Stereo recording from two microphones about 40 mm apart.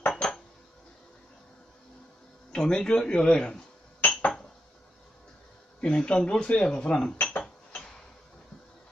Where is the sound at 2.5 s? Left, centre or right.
Centre.